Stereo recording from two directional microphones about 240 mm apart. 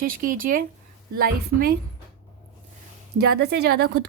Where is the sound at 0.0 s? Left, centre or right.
Right.